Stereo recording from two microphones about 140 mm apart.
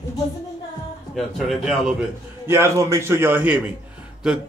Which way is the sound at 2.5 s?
20° right (ahead or behind).